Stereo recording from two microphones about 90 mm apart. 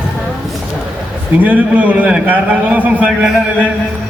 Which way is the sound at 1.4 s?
15° right (ahead or behind).